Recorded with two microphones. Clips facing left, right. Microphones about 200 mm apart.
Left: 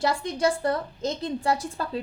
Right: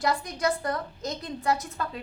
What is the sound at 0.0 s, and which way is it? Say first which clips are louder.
A woman's voice: left 3 dB; 25° left (ahead or behind).